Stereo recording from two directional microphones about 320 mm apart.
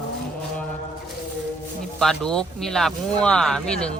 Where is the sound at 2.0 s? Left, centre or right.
Centre.